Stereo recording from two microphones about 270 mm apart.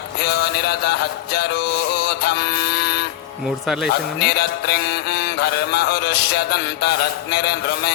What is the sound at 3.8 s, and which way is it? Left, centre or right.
Music, left.